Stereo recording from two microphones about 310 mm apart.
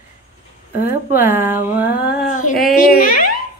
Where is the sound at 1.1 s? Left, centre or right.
Centre.